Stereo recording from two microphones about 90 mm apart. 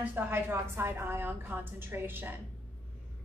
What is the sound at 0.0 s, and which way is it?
A woman's voice, 20° right (ahead or behind).